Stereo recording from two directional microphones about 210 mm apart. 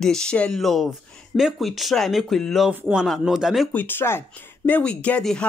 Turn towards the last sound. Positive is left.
turn(degrees=5)  # may be behind; listen again after turning